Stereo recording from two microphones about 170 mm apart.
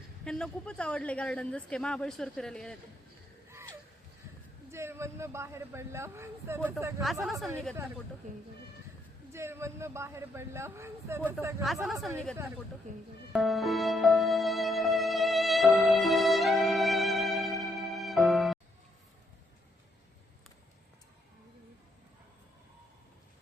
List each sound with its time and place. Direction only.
0.3 s speech: 5° left (ahead or behind)
4.7 s speech: 15° right (ahead or behind)
7.0 s speech: centre (ahead or behind)
9.3 s speech: 15° right (ahead or behind)
11.6 s speech: centre (ahead or behind)
12.9 s speech: 45° right (ahead or behind)
13.3 s music: centre (ahead or behind)